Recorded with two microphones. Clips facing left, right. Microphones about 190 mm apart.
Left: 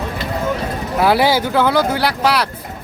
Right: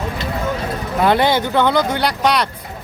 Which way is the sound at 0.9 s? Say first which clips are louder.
Left 1 dB; 5° left (ahead or behind).